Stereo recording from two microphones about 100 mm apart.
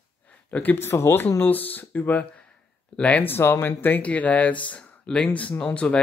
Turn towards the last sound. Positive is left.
turn(degrees=10)  # may be behind; listen again after turning